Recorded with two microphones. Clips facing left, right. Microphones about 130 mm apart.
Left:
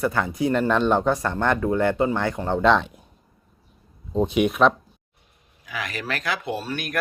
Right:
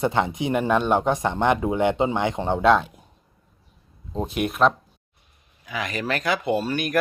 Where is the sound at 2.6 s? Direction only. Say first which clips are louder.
Right 1 dB; 5° right (ahead or behind).